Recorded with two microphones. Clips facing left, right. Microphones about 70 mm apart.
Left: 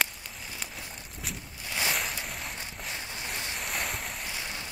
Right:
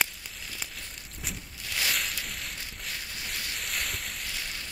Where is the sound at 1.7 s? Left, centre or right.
Left.